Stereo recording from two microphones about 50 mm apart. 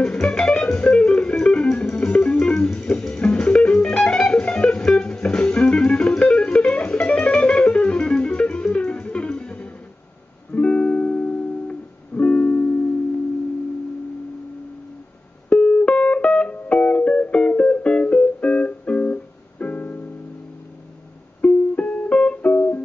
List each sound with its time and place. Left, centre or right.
0.0 s music: centre; by 12.7 s left
15.5 s music: left
21.4 s music: left